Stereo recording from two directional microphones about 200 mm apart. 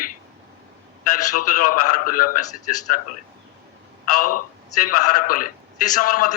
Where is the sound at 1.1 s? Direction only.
45° left (ahead or behind).